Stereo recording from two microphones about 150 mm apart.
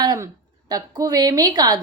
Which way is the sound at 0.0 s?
25° right (ahead or behind).